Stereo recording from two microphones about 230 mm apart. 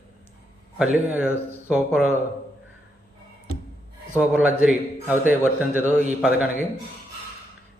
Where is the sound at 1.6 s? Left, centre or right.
Centre.